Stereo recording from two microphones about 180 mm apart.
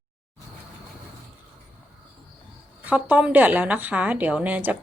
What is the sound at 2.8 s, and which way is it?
A woman's voice, 10° right (ahead or behind).